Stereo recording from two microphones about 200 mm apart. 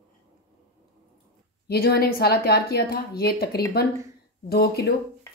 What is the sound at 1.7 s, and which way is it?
A woman's voice, 50° left (ahead or behind).